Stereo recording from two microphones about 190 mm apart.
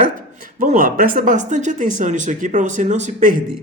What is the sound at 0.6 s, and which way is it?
A man's voice, 45° right (ahead or behind).